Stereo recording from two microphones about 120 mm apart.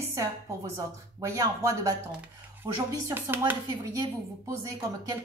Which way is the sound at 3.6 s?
30° right (ahead or behind).